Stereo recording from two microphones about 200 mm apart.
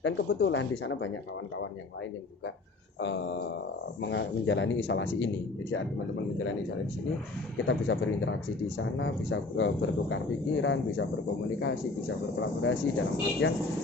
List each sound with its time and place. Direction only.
0.0 s speech: 65° left (ahead or behind)
3.0 s speech: 65° left (ahead or behind)
7.7 s speech: 70° left (ahead or behind)